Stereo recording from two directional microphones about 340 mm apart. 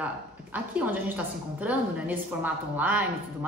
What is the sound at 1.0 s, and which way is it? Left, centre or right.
A woman's voice, centre.